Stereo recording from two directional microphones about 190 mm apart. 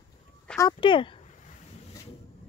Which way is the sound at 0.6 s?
25° left (ahead or behind).